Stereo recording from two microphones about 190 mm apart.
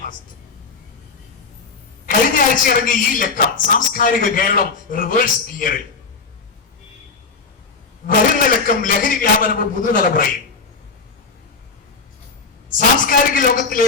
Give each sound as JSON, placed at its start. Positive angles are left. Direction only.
{"t": 2.0, "sound": "speech", "side_deg": 45}
{"t": 8.0, "sound": "speech", "side_deg": 45}
{"t": 12.7, "sound": "a man's voice", "side_deg": 45}